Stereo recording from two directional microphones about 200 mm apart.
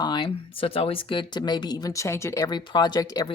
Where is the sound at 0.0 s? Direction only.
20° left (ahead or behind).